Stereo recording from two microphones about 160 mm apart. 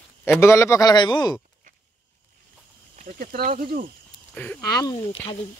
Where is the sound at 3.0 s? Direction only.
60° right (ahead or behind).